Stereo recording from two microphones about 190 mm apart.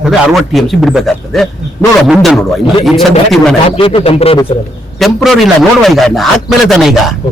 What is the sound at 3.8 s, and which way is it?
Speech, 30° left (ahead or behind).